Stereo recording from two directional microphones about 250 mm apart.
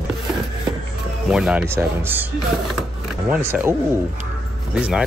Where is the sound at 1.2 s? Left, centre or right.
Centre.